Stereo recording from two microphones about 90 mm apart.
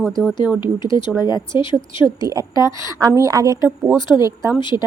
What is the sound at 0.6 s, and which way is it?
Speech, 60° left (ahead or behind).